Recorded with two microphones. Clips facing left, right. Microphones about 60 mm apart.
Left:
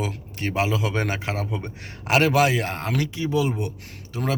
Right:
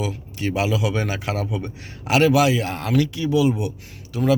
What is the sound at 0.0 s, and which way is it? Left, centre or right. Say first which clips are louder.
Speech: right 3 dB; left.